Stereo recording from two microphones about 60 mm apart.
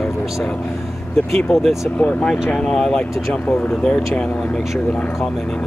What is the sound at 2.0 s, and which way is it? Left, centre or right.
Speech, centre.